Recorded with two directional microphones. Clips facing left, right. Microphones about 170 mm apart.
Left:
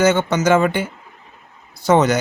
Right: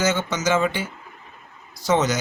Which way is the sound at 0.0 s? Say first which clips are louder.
Left 7 dB; 60° left (ahead or behind).